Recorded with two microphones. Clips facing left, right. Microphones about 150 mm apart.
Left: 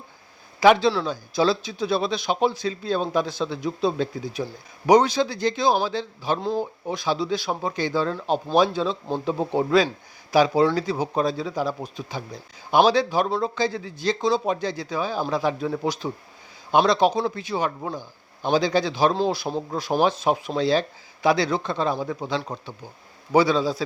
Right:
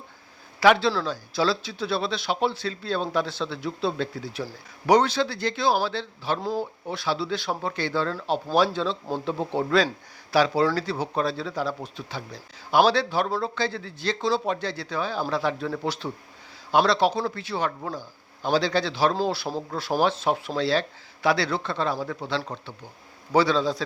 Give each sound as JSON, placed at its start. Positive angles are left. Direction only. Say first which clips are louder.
{"t": 0.6, "sound": "a man's voice", "louder": "left 3 dB", "side_deg": 20}